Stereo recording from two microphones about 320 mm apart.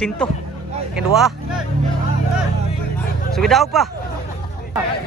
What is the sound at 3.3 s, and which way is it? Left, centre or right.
Speech, centre.